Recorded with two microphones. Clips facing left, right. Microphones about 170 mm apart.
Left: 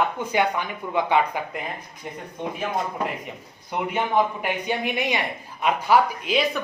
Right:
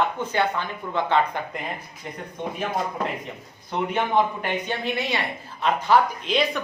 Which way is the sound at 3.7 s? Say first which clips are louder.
Even; 10° left (ahead or behind).